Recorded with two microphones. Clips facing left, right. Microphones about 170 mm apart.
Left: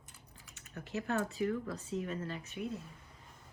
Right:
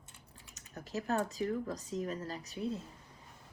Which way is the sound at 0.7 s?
40° right (ahead or behind).